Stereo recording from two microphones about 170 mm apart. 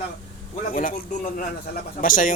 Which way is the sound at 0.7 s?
55° left (ahead or behind).